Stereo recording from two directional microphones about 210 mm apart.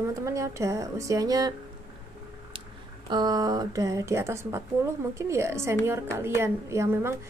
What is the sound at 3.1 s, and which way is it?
A woman's voice, 20° right (ahead or behind).